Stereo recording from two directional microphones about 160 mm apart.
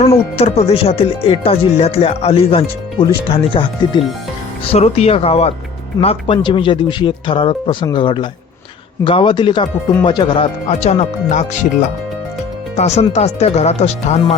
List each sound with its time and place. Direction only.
0.0 s music: 40° left (ahead or behind)
4.7 s music: 40° left (ahead or behind)
7.9 s speech: 30° left (ahead or behind)
9.0 s music: 30° left (ahead or behind); by 11.7 s 50° left (ahead or behind)
12.7 s speech: 45° left (ahead or behind)